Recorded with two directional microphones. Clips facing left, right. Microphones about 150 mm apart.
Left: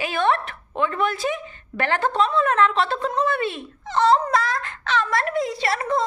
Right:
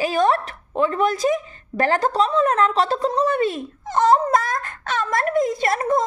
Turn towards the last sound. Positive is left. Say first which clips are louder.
# right 3 dB
turn(degrees=-45)  # may be behind; listen again after turning